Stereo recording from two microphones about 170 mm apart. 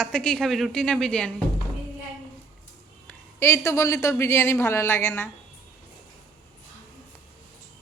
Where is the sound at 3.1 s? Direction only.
15° left (ahead or behind).